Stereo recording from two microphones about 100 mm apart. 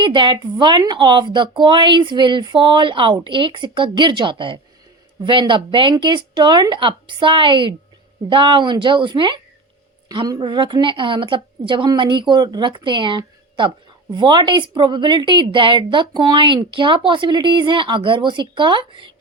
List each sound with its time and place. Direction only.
0.0 s speech: 50° right (ahead or behind)